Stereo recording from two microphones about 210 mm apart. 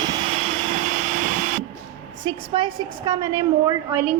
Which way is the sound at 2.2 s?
20° right (ahead or behind).